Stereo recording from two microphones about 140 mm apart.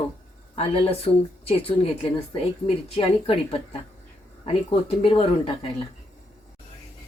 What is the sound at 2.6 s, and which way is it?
Speech, 40° left (ahead or behind).